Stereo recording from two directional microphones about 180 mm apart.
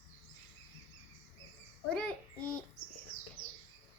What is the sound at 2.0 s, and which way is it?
Child singing, 5° left (ahead or behind).